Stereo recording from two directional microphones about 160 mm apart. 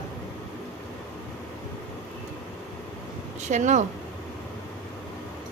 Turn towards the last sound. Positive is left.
turn(degrees=-45)  # may be behind; listen again after turning